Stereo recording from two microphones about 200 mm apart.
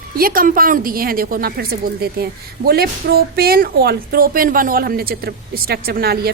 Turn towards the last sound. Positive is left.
turn(degrees=-50)  # may be behind; listen again after turning